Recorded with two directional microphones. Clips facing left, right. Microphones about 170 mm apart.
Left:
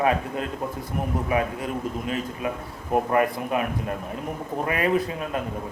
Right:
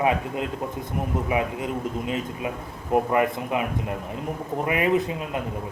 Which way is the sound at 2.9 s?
20° right (ahead or behind).